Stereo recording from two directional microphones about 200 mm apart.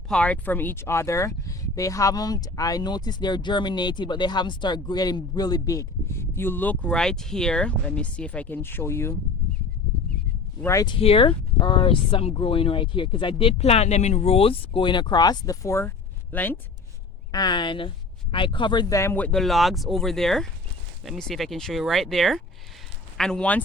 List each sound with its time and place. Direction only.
0.1 s speech: 5° left (ahead or behind)
10.6 s speech: 15° left (ahead or behind)
17.3 s speech: 20° left (ahead or behind)